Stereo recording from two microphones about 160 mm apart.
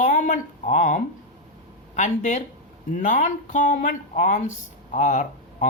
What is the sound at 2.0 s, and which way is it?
Speech, 50° left (ahead or behind).